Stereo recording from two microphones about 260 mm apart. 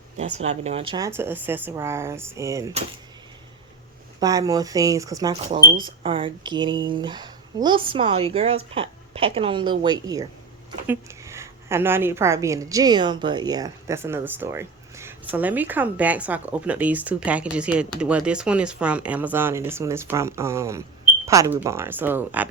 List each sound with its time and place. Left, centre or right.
0.3 s a woman's voice: right
4.2 s a woman's voice: centre